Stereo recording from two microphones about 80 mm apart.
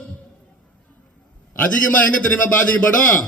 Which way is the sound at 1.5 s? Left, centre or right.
Centre.